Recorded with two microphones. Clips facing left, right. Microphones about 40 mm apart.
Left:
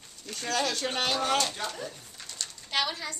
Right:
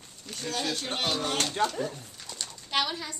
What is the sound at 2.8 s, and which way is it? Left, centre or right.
Speech, centre.